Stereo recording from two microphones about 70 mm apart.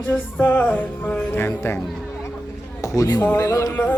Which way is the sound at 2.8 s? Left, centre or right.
Left.